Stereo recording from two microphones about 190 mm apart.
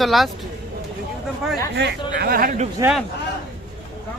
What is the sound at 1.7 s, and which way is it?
Speech, 60° right (ahead or behind).